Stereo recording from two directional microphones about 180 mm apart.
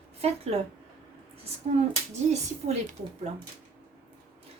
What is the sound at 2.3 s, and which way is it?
Speech, 40° right (ahead or behind).